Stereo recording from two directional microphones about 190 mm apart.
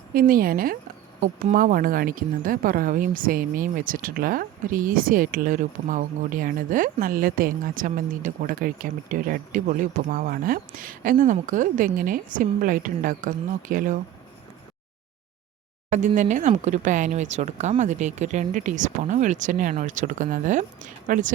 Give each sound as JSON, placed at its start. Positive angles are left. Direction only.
{"t": 0.1, "sound": "speech", "side_deg": -50}
{"t": 15.9, "sound": "speech", "side_deg": -40}